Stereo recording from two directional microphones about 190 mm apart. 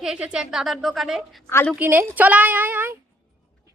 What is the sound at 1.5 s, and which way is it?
Speech, 10° left (ahead or behind).